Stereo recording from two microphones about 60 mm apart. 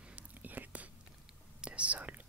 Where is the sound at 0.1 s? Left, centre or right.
Right.